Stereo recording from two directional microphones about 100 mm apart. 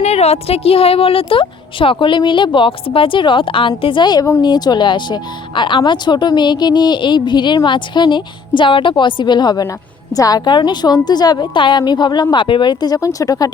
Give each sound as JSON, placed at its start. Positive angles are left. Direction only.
{"t": 0.0, "sound": "a woman's voice", "side_deg": 90}